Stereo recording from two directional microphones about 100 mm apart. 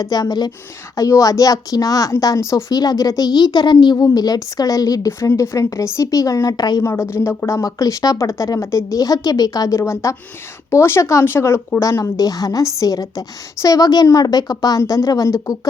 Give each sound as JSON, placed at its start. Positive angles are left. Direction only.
{"t": 0.0, "sound": "speech", "side_deg": 40}
{"t": 6.8, "sound": "speech", "side_deg": 25}